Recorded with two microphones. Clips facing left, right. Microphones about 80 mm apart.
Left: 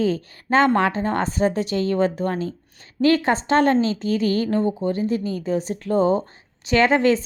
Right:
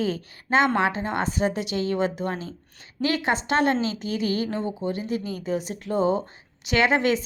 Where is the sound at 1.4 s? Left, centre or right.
Left.